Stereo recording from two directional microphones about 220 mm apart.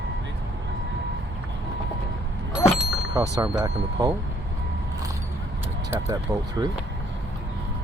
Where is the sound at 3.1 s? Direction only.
15° right (ahead or behind).